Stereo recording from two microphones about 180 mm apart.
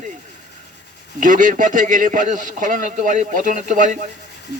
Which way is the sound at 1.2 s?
45° right (ahead or behind).